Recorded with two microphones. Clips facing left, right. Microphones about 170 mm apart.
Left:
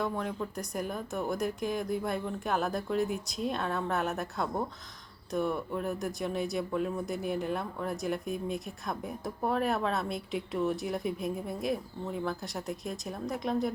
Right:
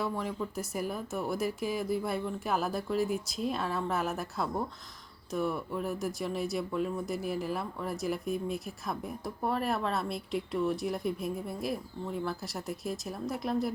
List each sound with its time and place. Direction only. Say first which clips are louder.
0.0 s speech: left 1 dB; centre (ahead or behind)